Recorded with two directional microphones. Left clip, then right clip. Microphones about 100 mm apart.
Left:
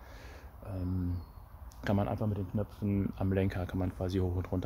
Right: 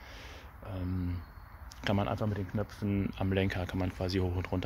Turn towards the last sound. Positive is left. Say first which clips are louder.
# right 1 dB
turn(degrees=15)  # may be behind; listen again after turning